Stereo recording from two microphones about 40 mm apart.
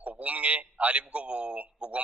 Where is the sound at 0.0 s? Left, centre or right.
Right.